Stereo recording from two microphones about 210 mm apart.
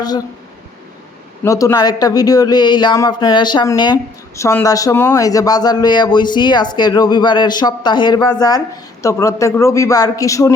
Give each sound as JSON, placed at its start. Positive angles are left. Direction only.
{"t": 1.5, "sound": "a man's voice", "side_deg": 15}